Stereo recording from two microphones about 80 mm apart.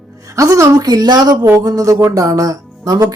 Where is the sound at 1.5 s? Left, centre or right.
Right.